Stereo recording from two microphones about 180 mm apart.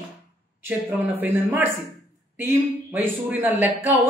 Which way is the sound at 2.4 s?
10° right (ahead or behind).